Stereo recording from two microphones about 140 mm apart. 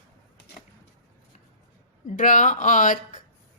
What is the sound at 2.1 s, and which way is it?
Speech, 65° left (ahead or behind).